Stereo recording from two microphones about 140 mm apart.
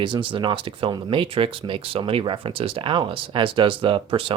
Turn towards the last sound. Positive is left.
turn(degrees=-40)  # may be behind; listen again after turning